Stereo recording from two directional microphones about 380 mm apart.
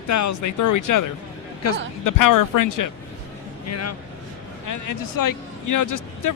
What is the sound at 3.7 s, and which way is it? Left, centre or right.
Speech, left.